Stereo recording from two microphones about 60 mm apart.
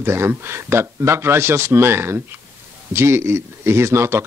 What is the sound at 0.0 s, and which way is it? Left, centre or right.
Speech, right.